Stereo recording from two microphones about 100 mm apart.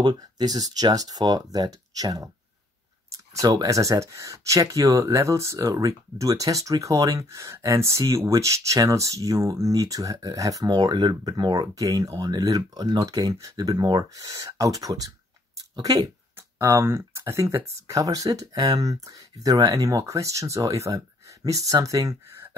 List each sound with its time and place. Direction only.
0.0 s speech: 45° right (ahead or behind)
11.7 s speech: 35° right (ahead or behind)
16.5 s speech: 25° right (ahead or behind)